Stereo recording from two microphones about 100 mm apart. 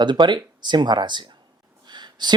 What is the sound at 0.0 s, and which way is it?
Speech, 50° right (ahead or behind).